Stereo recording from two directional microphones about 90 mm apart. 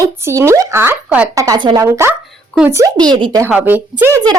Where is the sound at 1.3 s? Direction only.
40° right (ahead or behind).